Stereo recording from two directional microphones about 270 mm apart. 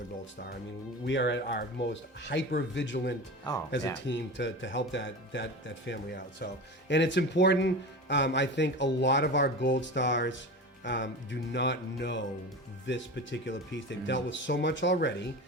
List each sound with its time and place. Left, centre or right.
1.0 s speech: left
3.5 s speech: centre
4.0 s speech: left